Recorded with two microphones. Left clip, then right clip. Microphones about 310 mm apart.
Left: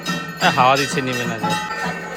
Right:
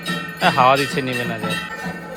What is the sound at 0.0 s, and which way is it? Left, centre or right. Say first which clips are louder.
Music: even; left.